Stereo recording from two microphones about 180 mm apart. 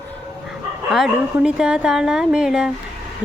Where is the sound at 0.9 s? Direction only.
Centre (ahead or behind).